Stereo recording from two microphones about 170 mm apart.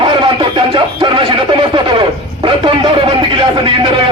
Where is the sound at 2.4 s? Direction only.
30° right (ahead or behind).